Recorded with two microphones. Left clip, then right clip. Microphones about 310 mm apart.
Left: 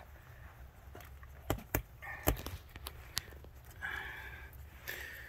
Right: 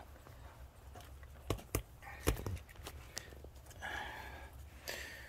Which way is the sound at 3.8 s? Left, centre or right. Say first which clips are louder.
Left 2 dB; centre.